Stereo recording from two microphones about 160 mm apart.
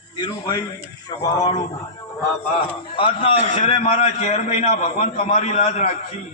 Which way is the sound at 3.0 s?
35° left (ahead or behind).